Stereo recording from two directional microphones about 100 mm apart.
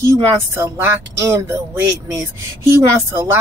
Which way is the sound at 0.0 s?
30° right (ahead or behind).